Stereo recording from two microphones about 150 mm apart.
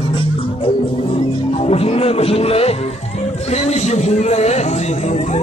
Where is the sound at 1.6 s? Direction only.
40° left (ahead or behind).